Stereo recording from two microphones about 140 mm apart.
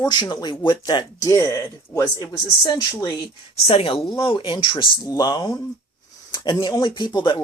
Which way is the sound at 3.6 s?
40° left (ahead or behind).